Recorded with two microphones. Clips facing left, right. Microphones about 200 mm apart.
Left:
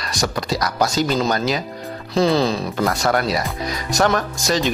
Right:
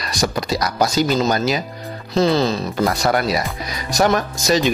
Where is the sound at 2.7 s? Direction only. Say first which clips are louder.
Right 2 dB; 10° right (ahead or behind).